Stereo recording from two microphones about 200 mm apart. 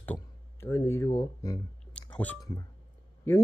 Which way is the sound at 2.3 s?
20° left (ahead or behind).